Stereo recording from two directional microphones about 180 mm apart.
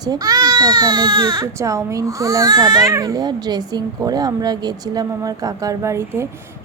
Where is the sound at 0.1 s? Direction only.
20° right (ahead or behind).